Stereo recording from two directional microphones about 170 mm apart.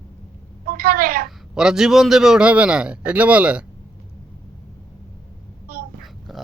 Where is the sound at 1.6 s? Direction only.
5° right (ahead or behind).